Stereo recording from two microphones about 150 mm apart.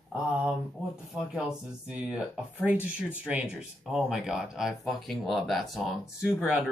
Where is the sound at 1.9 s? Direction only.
5° right (ahead or behind).